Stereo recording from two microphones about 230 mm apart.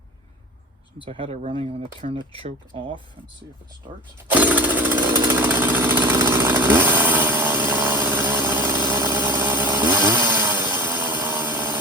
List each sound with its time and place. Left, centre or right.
1.0 s speech: right
4.3 s jackhammer: centre
8.9 s chainsaw: centre